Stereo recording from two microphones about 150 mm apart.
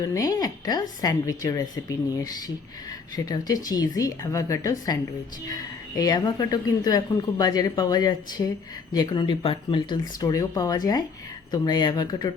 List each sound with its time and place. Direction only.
0.0 s speech: 25° left (ahead or behind)
6.0 s speech: 25° left (ahead or behind)
10.2 s speech: 25° left (ahead or behind)